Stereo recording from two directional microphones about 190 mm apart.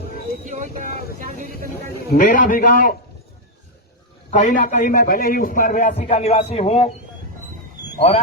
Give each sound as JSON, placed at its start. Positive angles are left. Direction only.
{"t": 0.4, "sound": "speech", "side_deg": -45}
{"t": 2.0, "sound": "a man's voice", "side_deg": 45}
{"t": 4.3, "sound": "a man's voice", "side_deg": 40}